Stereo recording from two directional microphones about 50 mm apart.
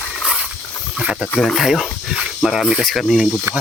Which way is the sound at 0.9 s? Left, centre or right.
Centre.